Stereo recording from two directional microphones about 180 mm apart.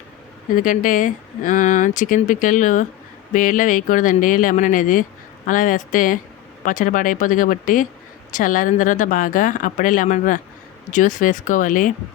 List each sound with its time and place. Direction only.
0.5 s speech: 50° left (ahead or behind)